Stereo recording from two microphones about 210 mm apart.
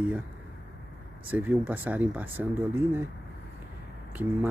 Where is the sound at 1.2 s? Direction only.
10° right (ahead or behind).